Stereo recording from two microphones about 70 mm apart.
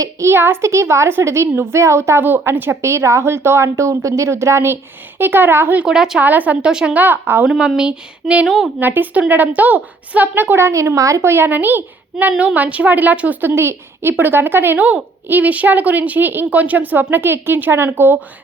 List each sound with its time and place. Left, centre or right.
0.0 s a woman's voice: right
2.2 s a woman's voice: right
2.8 s a woman's voice: right
5.8 s a sound: centre
6.1 s a woman's voice: right
6.7 s a sound: centre
6.9 s a woman's voice: right
7.4 s a sound: centre
8.8 s a woman's voice: right
10.7 s a woman's voice: right
11.3 s a woman's voice: right
12.1 s a sound: centre
12.5 s a woman's voice: centre